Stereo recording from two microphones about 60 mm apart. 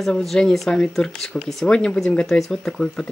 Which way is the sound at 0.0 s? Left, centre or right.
Centre.